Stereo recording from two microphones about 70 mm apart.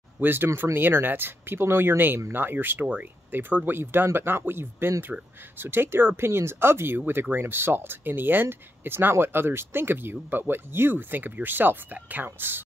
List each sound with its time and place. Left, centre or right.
0.2 s speech: right